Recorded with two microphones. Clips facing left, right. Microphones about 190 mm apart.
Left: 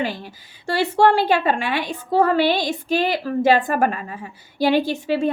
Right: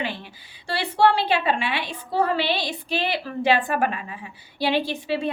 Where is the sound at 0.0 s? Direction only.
40° left (ahead or behind).